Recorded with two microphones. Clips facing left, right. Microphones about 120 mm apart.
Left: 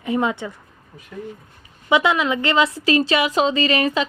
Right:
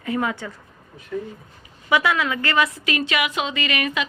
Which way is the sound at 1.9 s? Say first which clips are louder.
Left 3 dB; 20° left (ahead or behind).